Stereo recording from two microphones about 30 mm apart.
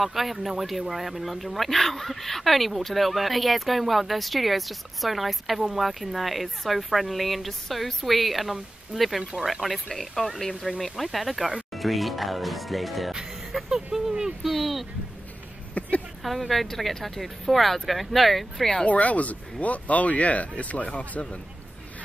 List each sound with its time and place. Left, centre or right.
0.0 s speech: centre
13.1 s music: right
14.4 s a sound: centre
15.8 s a sound: left
16.2 s a woman's voice: centre
18.9 s speech: left